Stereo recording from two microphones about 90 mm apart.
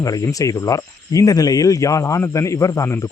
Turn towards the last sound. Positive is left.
turn(degrees=35)  # may be behind; listen again after turning